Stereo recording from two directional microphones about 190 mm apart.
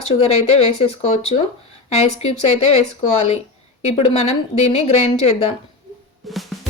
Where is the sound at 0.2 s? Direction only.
35° left (ahead or behind).